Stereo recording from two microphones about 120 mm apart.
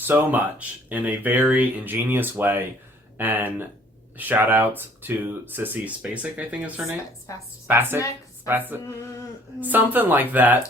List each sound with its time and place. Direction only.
0.1 s speech: 15° right (ahead or behind)
7.3 s a woman's voice: 25° left (ahead or behind)
7.7 s speech: 20° right (ahead or behind)